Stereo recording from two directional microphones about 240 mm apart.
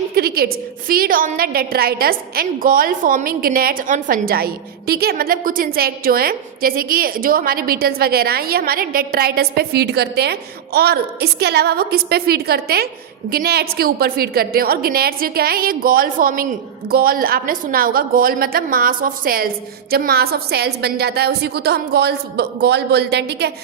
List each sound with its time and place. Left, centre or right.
0.2 s a woman's voice: right